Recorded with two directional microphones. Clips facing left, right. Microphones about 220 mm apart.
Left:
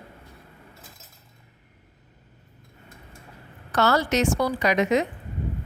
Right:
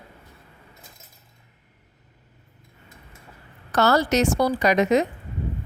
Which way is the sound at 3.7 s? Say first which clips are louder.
Right 2 dB; 40° right (ahead or behind).